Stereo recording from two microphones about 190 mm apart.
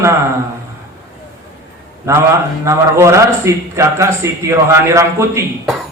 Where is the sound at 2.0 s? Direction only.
15° right (ahead or behind).